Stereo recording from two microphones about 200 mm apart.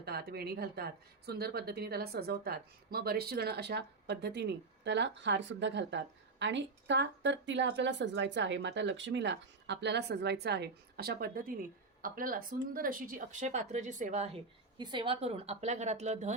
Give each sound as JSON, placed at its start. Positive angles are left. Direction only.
{"t": 0.0, "sound": "a woman's voice", "side_deg": -50}
{"t": 14.8, "sound": "a woman's voice", "side_deg": -25}